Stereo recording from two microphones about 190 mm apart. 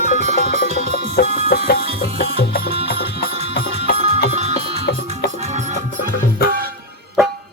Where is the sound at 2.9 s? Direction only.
30° right (ahead or behind).